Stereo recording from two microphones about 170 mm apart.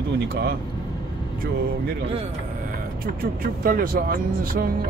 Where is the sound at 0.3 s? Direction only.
65° right (ahead or behind).